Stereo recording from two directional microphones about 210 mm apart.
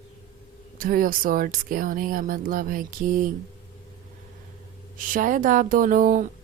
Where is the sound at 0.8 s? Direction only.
40° right (ahead or behind).